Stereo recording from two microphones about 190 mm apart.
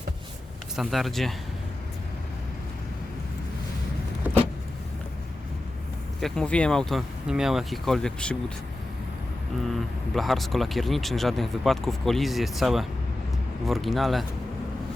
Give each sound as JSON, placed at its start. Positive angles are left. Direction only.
{"t": 0.8, "sound": "speech", "side_deg": 0}
{"t": 6.1, "sound": "speech", "side_deg": 5}
{"t": 10.2, "sound": "speech", "side_deg": 0}